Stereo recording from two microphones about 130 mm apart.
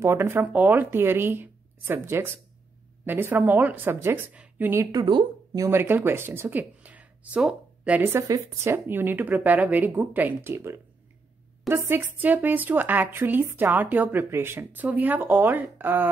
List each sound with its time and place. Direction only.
0.0 s speech: 20° right (ahead or behind)
4.9 s speech: 30° right (ahead or behind); by 16.1 s 15° right (ahead or behind)